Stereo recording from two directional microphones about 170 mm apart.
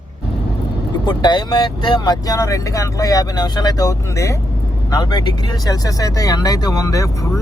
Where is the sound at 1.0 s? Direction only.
25° left (ahead or behind).